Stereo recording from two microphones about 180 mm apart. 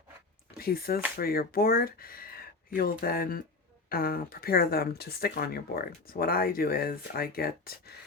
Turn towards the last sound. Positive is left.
turn(degrees=55)  # may be behind; listen again after turning